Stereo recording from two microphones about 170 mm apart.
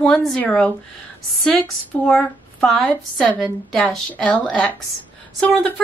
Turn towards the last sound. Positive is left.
turn(degrees=5)  # may be behind; listen again after turning